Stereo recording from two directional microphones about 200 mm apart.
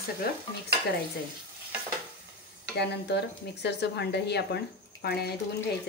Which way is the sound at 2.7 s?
55° left (ahead or behind).